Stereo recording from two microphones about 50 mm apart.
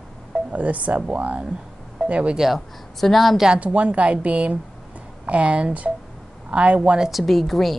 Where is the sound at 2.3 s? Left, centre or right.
Centre.